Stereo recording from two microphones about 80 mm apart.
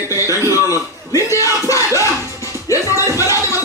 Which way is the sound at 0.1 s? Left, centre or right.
Left.